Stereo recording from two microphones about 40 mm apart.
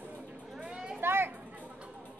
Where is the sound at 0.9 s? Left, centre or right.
Right.